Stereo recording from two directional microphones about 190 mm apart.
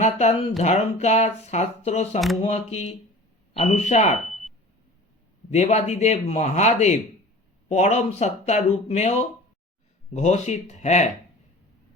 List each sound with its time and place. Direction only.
0.0 s speech: 35° left (ahead or behind)
4.3 s a sound: centre (ahead or behind)
5.5 s speech: 35° left (ahead or behind)
10.2 s speech: 35° left (ahead or behind)